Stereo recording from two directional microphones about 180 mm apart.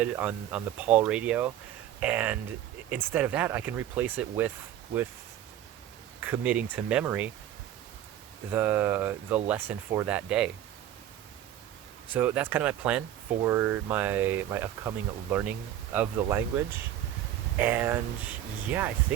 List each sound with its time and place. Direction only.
0.0 s speech: 10° right (ahead or behind)
6.1 s speech: 10° right (ahead or behind)
8.5 s speech: 10° right (ahead or behind)
12.1 s speech: 10° right (ahead or behind)